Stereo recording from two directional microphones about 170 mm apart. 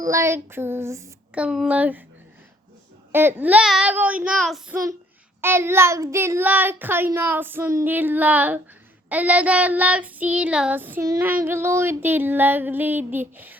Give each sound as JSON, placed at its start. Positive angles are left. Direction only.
{"t": 0.1, "sound": "a child's voice", "side_deg": -15}
{"t": 3.1, "sound": "a child's voice", "side_deg": -15}
{"t": 5.4, "sound": "a child's voice", "side_deg": -15}